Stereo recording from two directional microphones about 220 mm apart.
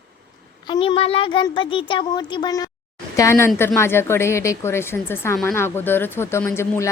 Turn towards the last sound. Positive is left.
turn(degrees=10)  # may be behind; listen again after turning